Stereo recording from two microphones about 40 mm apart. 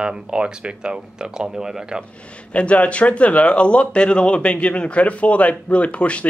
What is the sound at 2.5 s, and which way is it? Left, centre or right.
A man's voice, left.